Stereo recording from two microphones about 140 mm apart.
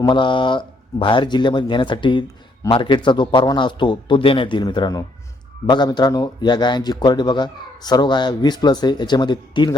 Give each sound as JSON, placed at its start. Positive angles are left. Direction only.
{"t": 0.0, "sound": "a man's voice", "side_deg": 35}